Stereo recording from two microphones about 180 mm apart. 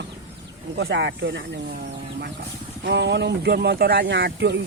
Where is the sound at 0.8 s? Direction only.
70° right (ahead or behind).